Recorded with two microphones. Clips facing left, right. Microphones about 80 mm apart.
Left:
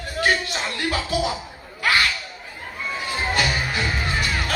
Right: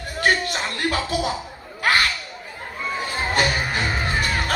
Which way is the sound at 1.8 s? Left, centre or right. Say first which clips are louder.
Right 1 dB; right.